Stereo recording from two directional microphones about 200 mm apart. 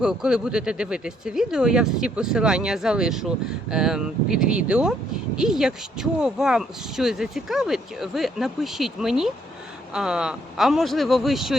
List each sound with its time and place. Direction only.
0.0 s speech: 5° right (ahead or behind)